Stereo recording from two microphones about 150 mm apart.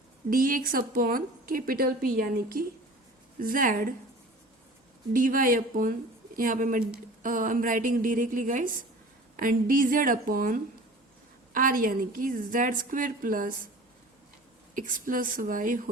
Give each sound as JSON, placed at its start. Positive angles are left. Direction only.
{"t": 0.3, "sound": "a woman's voice", "side_deg": -65}
{"t": 5.1, "sound": "a woman's voice", "side_deg": -65}
{"t": 14.8, "sound": "a woman's voice", "side_deg": -65}